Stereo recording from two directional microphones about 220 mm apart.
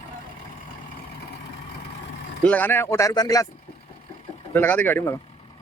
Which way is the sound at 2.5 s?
10° left (ahead or behind).